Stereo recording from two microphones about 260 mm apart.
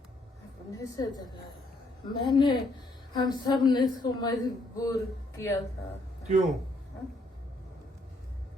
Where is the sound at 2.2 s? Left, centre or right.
Centre.